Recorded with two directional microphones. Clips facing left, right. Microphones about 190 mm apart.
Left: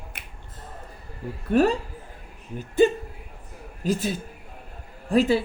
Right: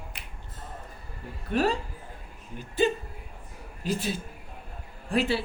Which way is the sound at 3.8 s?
45° left (ahead or behind).